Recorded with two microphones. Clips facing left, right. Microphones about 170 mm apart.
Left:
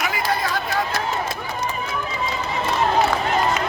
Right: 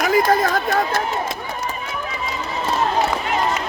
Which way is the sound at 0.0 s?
45° right (ahead or behind).